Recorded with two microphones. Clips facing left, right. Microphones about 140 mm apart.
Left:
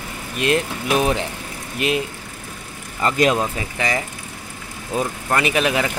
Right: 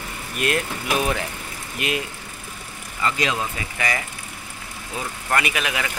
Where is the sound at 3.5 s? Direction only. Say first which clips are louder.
Left 3 dB; 25° left (ahead or behind).